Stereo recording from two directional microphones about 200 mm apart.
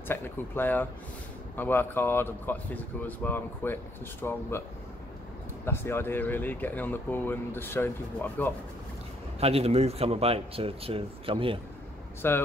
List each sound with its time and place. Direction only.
0.1 s speech: 10° left (ahead or behind)
5.7 s speech: 10° left (ahead or behind)
9.4 s speech: 30° right (ahead or behind)
12.2 s speech: 10° left (ahead or behind)